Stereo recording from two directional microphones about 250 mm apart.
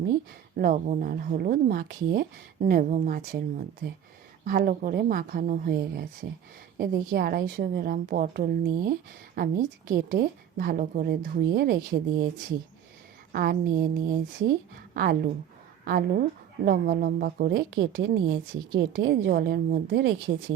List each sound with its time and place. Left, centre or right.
0.5 s a woman's voice: right
13.3 s a woman's voice: right